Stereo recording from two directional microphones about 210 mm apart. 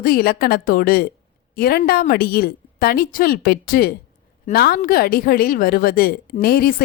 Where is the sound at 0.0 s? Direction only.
45° left (ahead or behind).